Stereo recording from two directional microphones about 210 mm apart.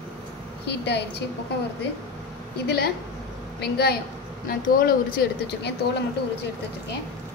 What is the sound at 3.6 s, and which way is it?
Speech, 50° left (ahead or behind).